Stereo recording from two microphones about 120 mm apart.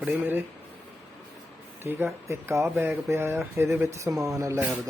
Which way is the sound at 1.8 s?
20° right (ahead or behind).